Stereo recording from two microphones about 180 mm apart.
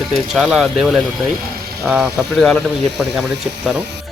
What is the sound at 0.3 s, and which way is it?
Speech, centre (ahead or behind).